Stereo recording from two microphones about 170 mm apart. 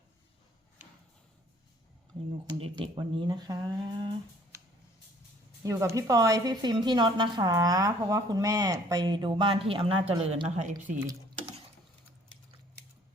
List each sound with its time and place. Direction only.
2.5 s a woman's voice: 30° right (ahead or behind)
5.6 s a woman's voice: 15° right (ahead or behind); by 10.9 s 45° right (ahead or behind)